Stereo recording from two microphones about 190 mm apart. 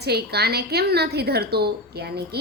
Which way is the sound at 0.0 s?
60° right (ahead or behind).